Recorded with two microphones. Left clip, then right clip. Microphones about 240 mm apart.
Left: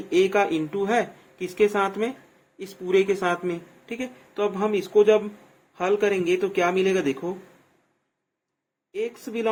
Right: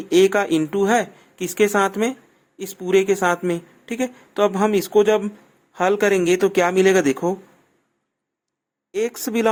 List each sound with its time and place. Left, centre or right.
0.1 s speech: right
8.9 s speech: right